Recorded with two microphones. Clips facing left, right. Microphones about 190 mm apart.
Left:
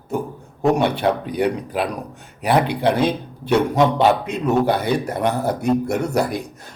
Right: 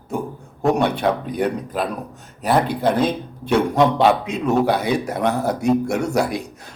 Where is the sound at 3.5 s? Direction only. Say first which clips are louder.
Even; 5° left (ahead or behind).